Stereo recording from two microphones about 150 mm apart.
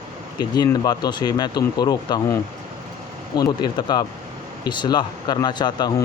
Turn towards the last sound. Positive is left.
turn(degrees=30)  # may be behind; listen again after turning